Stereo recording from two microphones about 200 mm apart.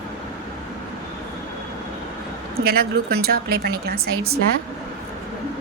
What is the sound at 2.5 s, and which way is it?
Speech, 50° right (ahead or behind).